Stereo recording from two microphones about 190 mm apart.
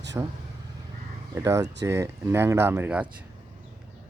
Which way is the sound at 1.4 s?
15° right (ahead or behind).